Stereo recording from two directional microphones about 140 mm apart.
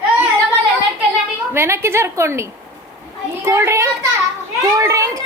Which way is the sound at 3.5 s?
20° right (ahead or behind).